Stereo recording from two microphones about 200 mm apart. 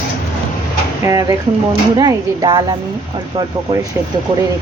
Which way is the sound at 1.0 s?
15° right (ahead or behind).